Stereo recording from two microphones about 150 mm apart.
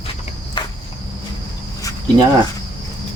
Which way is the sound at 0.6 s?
35° left (ahead or behind).